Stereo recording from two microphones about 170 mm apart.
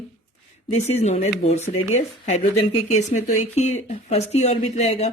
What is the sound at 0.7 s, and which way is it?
Speech, 40° left (ahead or behind).